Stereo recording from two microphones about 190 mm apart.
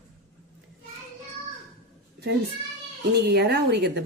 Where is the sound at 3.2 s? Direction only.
60° right (ahead or behind).